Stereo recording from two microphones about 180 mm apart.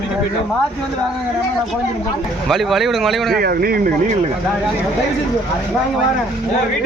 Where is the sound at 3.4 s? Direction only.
55° right (ahead or behind).